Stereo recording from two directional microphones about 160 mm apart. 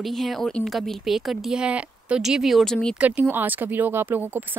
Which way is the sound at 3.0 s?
10° right (ahead or behind).